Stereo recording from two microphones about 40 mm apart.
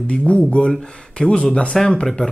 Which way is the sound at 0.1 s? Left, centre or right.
Left.